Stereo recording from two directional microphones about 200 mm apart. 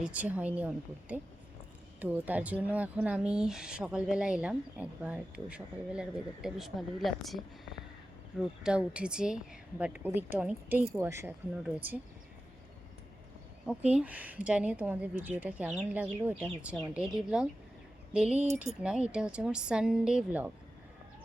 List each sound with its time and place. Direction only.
0.0 s a woman's voice: 5° right (ahead or behind)
8.6 s a woman's voice: 5° right (ahead or behind)
13.7 s a woman's voice: 5° right (ahead or behind)
18.4 s speech: 35° right (ahead or behind)
18.8 s speech: 5° right (ahead or behind)